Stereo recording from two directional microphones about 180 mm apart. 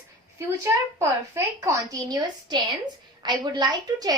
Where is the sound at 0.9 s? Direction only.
15° right (ahead or behind).